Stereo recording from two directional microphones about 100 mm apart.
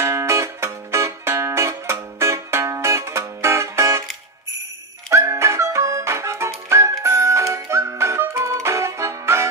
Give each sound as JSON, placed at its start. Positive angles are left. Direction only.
{"t": 0.0, "sound": "music", "side_deg": -30}
{"t": 5.1, "sound": "music", "side_deg": -30}